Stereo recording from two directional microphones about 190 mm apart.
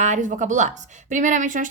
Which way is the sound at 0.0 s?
40° right (ahead or behind).